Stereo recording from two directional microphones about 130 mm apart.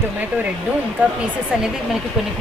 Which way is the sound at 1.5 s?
5° right (ahead or behind).